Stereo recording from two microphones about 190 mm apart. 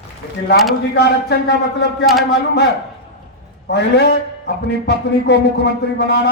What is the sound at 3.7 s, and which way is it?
A man's voice, 60° left (ahead or behind).